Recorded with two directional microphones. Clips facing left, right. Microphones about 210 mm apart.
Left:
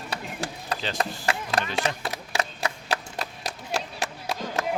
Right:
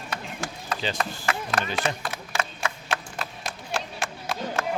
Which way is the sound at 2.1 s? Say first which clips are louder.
Left 1 dB; 35° left (ahead or behind).